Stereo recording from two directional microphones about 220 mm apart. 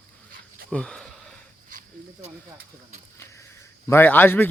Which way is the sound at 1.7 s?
35° right (ahead or behind).